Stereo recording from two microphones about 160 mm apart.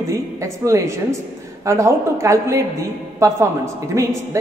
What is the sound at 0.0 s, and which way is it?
A woman's voice, 20° right (ahead or behind).